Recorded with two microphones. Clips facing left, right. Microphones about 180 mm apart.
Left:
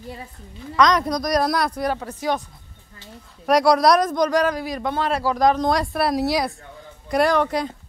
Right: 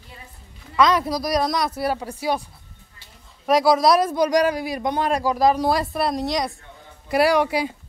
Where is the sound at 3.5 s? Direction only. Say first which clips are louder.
Left 1 dB; centre (ahead or behind).